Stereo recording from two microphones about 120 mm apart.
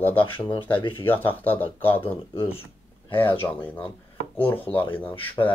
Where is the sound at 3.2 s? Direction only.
45° left (ahead or behind).